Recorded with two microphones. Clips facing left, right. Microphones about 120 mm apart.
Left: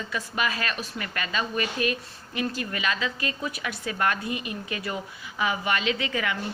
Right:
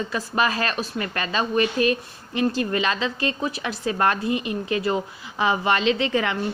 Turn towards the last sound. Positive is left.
turn(degrees=-30)  # may be behind; listen again after turning